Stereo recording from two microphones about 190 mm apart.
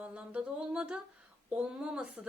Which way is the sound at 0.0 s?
10° right (ahead or behind).